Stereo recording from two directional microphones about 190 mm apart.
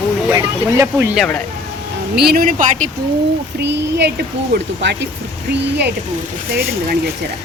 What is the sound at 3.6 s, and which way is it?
Speech, 65° right (ahead or behind).